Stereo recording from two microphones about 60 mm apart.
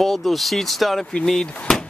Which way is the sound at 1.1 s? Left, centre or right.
Centre.